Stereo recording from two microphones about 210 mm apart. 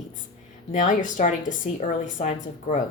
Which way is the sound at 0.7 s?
35° left (ahead or behind).